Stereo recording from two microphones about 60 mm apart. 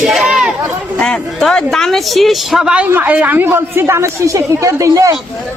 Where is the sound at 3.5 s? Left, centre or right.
Right.